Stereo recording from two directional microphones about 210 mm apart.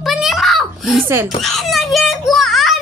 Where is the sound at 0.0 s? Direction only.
Centre (ahead or behind).